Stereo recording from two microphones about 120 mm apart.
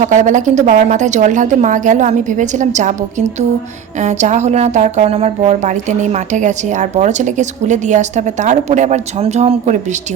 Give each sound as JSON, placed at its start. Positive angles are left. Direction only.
{"t": 0.0, "sound": "a woman's voice", "side_deg": -90}